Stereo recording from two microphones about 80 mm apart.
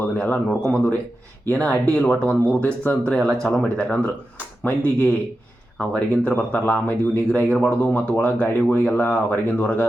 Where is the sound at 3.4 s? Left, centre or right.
Centre.